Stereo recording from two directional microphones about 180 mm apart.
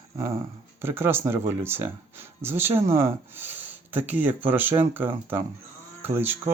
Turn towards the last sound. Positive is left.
turn(degrees=-10)  # may be behind; listen again after turning